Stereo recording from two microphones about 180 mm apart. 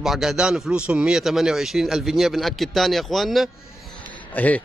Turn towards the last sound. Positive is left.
turn(degrees=10)  # may be behind; listen again after turning